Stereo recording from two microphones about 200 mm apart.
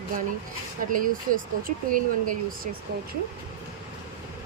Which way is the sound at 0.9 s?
45° right (ahead or behind).